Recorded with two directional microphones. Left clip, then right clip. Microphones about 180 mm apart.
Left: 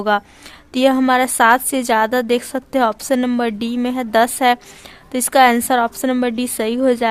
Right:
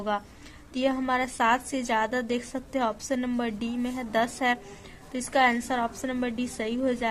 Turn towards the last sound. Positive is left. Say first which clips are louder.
# left 12 dB
turn(degrees=35)  # may be behind; listen again after turning